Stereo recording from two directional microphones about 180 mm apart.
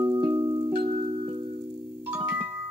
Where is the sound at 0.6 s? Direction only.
30° right (ahead or behind).